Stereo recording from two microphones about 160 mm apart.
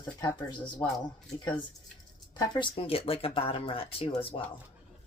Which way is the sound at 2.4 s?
30° left (ahead or behind).